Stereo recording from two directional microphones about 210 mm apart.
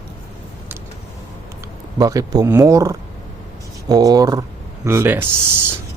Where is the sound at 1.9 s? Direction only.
15° right (ahead or behind).